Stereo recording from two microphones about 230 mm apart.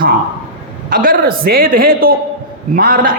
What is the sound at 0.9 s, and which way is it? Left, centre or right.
A man's voice, right.